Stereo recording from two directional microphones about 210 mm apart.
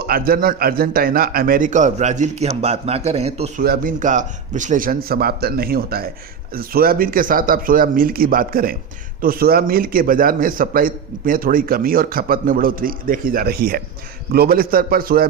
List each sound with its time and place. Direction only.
0.0 s a man's voice: 45° right (ahead or behind); by 3.5 s 30° right (ahead or behind)
3.6 s a man's voice: 45° right (ahead or behind)